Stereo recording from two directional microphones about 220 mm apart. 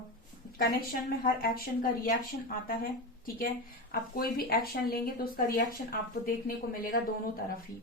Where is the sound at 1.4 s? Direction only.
45° left (ahead or behind).